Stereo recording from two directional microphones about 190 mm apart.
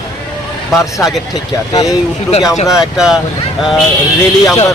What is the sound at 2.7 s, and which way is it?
Speech, 5° right (ahead or behind).